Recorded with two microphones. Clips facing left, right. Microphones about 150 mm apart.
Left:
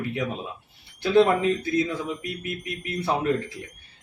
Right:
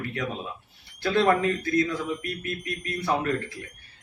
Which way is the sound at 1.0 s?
20° left (ahead or behind).